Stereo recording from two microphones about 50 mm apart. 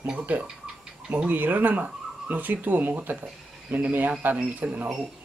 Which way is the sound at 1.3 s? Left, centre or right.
Right.